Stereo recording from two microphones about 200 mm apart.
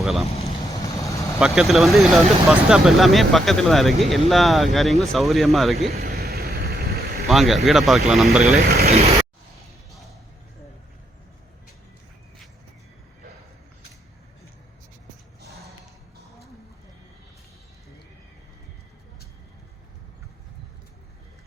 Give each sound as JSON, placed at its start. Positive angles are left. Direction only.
{"t": 0.0, "sound": "speech", "side_deg": 0}
{"t": 1.4, "sound": "speech", "side_deg": 0}
{"t": 5.9, "sound": "vehicle", "side_deg": -50}
{"t": 7.3, "sound": "speech", "side_deg": 0}
{"t": 8.6, "sound": "speech", "side_deg": -50}
{"t": 8.9, "sound": "a sound", "side_deg": -30}